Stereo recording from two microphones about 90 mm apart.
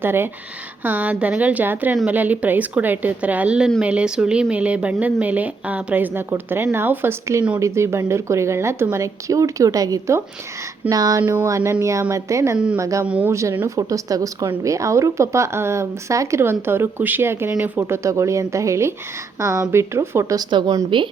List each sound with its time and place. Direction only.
0.0 s a woman's voice: 25° right (ahead or behind); by 10.2 s 40° right (ahead or behind)
10.8 s a sound: 40° right (ahead or behind)
11.4 s a woman's voice: 35° right (ahead or behind)
13.1 s speech: 15° right (ahead or behind)
13.3 s a woman's voice: 35° right (ahead or behind); by 20.7 s 55° right (ahead or behind)